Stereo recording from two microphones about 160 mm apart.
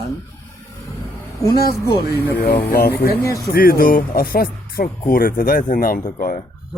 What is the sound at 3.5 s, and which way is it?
Speech, 65° left (ahead or behind).